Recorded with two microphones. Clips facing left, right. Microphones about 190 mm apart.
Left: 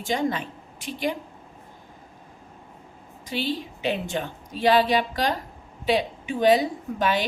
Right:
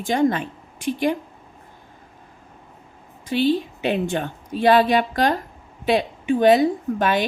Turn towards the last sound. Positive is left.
turn(degrees=-50)  # may be behind; listen again after turning